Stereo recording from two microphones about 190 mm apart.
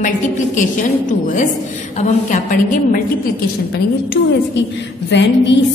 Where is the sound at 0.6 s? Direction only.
40° left (ahead or behind).